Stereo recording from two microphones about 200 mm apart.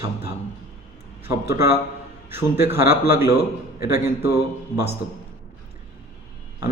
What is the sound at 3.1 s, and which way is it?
Speech, 15° right (ahead or behind).